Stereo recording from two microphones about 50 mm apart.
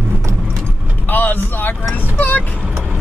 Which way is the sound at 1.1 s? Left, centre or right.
Left.